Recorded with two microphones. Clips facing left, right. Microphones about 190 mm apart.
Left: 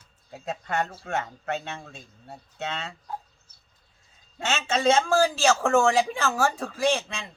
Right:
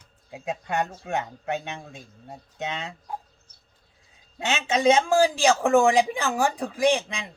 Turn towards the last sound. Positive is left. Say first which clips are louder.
# right 3 dB
turn(degrees=-15)  # may be behind; listen again after turning